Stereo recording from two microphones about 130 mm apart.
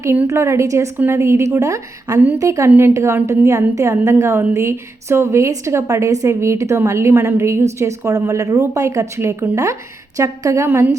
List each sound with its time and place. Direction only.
0.0 s a woman's voice: 20° right (ahead or behind)